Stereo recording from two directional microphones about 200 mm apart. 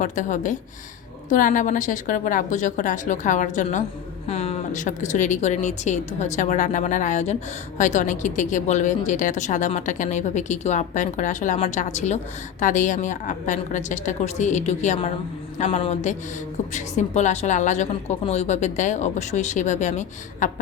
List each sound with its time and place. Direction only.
0.0 s a woman's voice: 40° left (ahead or behind)